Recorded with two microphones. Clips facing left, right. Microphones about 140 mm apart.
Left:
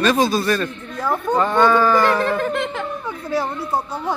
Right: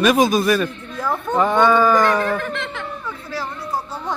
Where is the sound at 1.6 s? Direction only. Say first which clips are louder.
Even; 10° right (ahead or behind).